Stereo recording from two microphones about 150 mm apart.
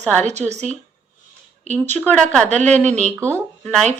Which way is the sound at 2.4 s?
50° right (ahead or behind).